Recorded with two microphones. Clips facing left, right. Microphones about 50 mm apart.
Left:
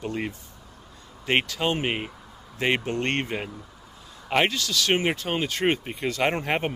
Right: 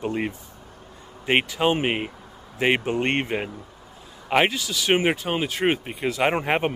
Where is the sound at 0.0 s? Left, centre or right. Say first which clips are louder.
Right 4 dB; centre.